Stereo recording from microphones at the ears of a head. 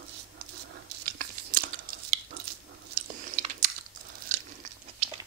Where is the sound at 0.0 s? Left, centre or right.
Right.